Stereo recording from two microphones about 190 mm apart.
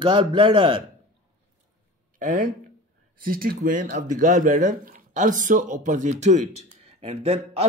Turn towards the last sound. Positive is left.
turn(degrees=-35)  # may be behind; listen again after turning